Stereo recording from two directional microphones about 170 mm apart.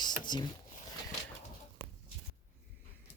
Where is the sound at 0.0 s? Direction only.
25° left (ahead or behind).